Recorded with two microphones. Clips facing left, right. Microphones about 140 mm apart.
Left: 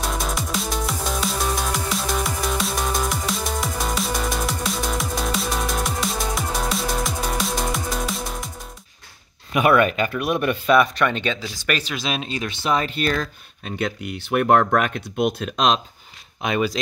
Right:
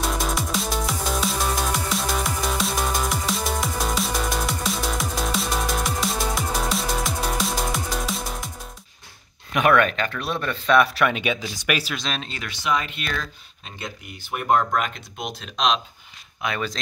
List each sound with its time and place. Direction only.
0.0 s music: centre (ahead or behind)
9.5 s speech: 5° left (ahead or behind)
10.8 s speech: 5° right (ahead or behind)
11.9 s speech: 5° left (ahead or behind); by 13.3 s 40° left (ahead or behind)
13.7 s speech: 65° left (ahead or behind); by 15.8 s 45° left (ahead or behind)
16.4 s speech: 20° left (ahead or behind)